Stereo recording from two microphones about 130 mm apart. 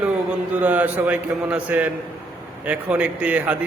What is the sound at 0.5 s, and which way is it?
A man's voice, 10° right (ahead or behind).